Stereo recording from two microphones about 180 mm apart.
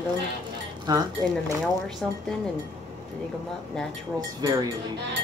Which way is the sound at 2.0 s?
Centre (ahead or behind).